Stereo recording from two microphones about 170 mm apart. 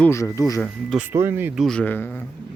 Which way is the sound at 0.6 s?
Centre (ahead or behind).